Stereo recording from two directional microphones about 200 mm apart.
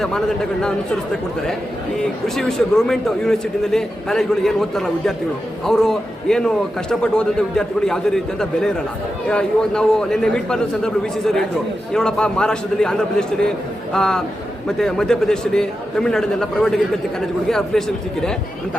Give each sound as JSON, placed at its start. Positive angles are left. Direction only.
{"t": 2.2, "sound": "a man's voice", "side_deg": 0}